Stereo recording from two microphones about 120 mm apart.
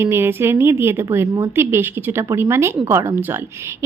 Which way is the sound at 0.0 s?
20° right (ahead or behind).